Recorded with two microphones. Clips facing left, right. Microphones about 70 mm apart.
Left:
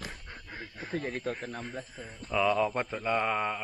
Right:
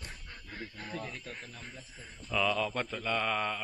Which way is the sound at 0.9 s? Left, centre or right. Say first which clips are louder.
Left 11 dB; left.